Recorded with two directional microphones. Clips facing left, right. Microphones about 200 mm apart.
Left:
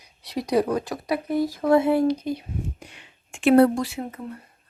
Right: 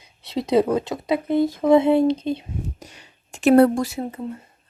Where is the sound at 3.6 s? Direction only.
45° right (ahead or behind).